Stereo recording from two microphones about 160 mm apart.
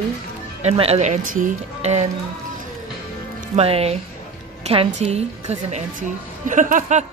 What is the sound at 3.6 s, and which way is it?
Speech, 40° right (ahead or behind).